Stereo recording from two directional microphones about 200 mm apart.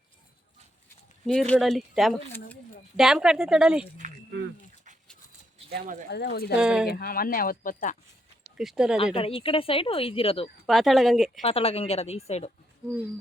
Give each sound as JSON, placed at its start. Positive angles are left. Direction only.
{"t": 1.3, "sound": "a woman's voice", "side_deg": 5}
{"t": 4.0, "sound": "a sound", "side_deg": -40}
{"t": 5.7, "sound": "speech", "side_deg": -45}
{"t": 6.1, "sound": "speech", "side_deg": 55}
{"t": 6.6, "sound": "speech", "side_deg": -5}
{"t": 6.8, "sound": "speech", "side_deg": 50}
{"t": 8.5, "sound": "speech", "side_deg": -5}
{"t": 9.1, "sound": "speech", "side_deg": 25}
{"t": 10.7, "sound": "speech", "side_deg": 0}
{"t": 11.4, "sound": "speech", "side_deg": 30}